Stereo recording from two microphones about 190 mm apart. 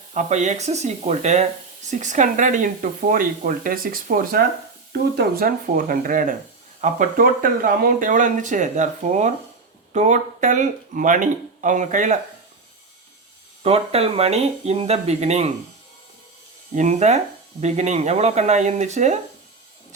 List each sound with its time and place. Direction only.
0.1 s speech: 40° right (ahead or behind)
13.6 s speech: 30° right (ahead or behind)
16.7 s speech: 40° right (ahead or behind)